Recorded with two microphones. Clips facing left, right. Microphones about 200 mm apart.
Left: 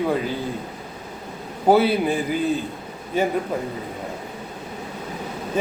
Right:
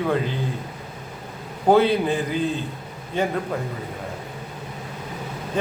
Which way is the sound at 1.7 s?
5° left (ahead or behind).